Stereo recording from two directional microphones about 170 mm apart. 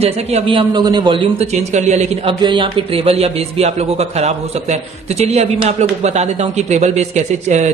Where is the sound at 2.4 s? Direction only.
30° right (ahead or behind).